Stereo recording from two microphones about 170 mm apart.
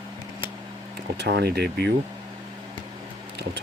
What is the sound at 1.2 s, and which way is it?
Speech, 80° right.